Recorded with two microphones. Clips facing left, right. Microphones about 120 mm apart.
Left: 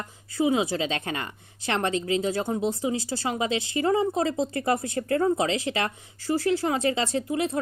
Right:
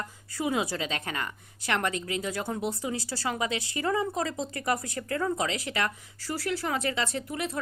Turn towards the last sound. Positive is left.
turn(degrees=30)  # may be behind; listen again after turning